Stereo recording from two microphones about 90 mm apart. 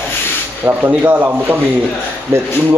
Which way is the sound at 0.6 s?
25° right (ahead or behind).